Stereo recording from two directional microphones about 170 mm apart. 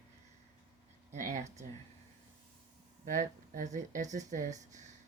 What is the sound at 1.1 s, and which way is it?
Speech, 45° right (ahead or behind).